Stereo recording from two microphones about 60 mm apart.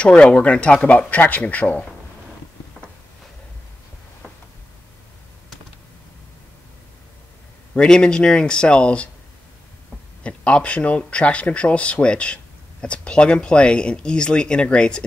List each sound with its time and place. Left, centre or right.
0.0 s a man's voice: left
7.7 s speech: centre
10.2 s a man's voice: centre